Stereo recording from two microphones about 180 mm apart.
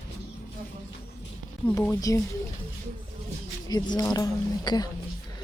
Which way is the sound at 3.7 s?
20° left (ahead or behind).